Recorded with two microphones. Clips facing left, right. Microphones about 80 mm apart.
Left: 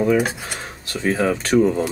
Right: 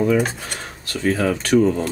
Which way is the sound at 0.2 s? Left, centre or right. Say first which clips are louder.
Even; centre.